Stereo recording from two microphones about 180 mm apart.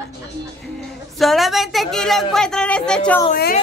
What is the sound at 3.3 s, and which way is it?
Speech, 50° left (ahead or behind).